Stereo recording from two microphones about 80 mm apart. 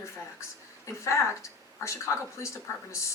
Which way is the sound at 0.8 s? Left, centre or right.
Left.